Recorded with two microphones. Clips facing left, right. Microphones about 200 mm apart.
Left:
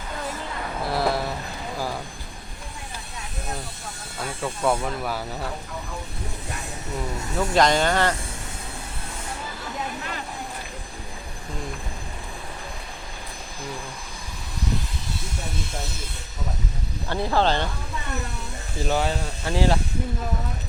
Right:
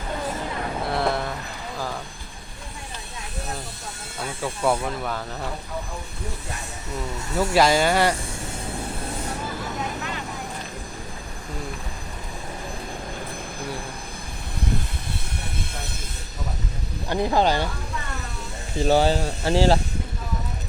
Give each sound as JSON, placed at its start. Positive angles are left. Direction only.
{"t": 0.9, "sound": "vehicle", "side_deg": 0}
{"t": 4.2, "sound": "speech", "side_deg": -5}
{"t": 7.3, "sound": "speech", "side_deg": -5}
{"t": 17.1, "sound": "speech", "side_deg": -15}
{"t": 18.9, "sound": "speech", "side_deg": -30}